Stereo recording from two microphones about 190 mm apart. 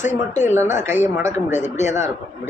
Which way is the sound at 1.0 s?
40° left (ahead or behind).